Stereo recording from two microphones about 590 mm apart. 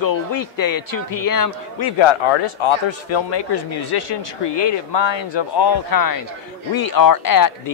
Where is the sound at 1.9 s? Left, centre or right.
Left.